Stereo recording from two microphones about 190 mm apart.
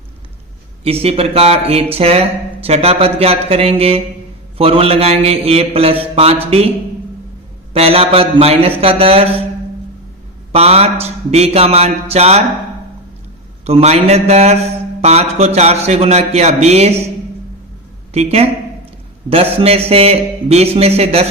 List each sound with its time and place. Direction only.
0.9 s mantra: 30° right (ahead or behind)
7.7 s mantra: 30° right (ahead or behind)
10.5 s mantra: 30° right (ahead or behind)
13.7 s mantra: 35° right (ahead or behind)
18.1 s mantra: 35° right (ahead or behind)